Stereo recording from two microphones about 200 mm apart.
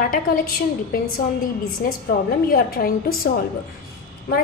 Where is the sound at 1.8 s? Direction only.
45° left (ahead or behind).